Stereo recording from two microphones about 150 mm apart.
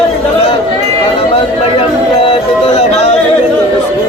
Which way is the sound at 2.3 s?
45° left (ahead or behind).